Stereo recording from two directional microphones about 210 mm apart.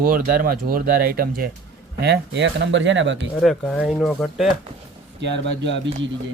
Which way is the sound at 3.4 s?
5° left (ahead or behind).